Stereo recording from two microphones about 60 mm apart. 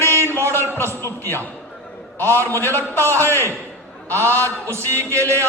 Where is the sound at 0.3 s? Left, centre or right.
Right.